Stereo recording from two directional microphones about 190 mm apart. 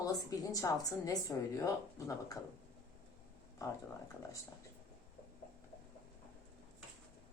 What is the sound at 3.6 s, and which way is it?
Speech, 15° left (ahead or behind).